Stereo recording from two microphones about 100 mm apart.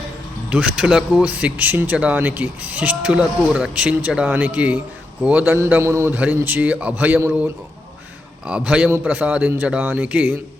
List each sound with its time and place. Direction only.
0.5 s speech: 10° right (ahead or behind)
5.8 s a man's voice: 25° right (ahead or behind)